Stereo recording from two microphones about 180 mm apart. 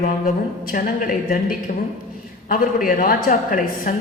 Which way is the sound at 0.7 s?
50° left (ahead or behind).